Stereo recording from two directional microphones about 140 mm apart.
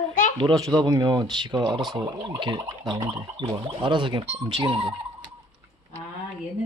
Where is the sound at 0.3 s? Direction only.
30° right (ahead or behind).